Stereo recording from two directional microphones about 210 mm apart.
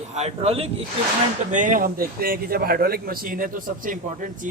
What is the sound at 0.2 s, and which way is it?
A man's voice, 30° right (ahead or behind).